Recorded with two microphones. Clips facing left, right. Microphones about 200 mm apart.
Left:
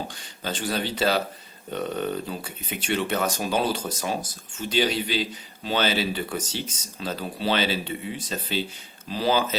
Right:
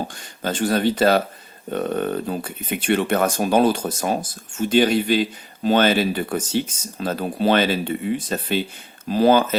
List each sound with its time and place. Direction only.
0.4 s speech: 50° right (ahead or behind)